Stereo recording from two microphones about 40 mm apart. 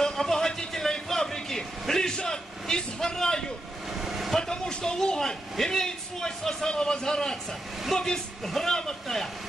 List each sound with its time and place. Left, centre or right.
0.0 s vehicle: centre
4.0 s vehicle: centre
4.4 s a sound: centre
7.9 s speech: centre
8.5 s vehicle: centre